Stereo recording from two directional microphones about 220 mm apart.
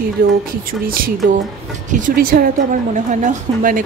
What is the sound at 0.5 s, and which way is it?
A woman's voice, 40° right (ahead or behind).